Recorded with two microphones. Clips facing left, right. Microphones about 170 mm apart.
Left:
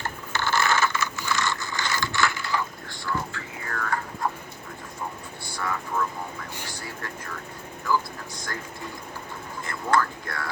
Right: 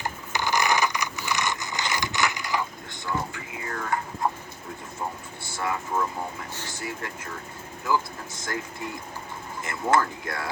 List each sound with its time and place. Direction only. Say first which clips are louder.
0.0 s a sound: even; 15° right (ahead or behind)
5.5 s vehicle: right 1 dB; 20° right (ahead or behind)
9.6 s speech: right 1 dB; 20° right (ahead or behind)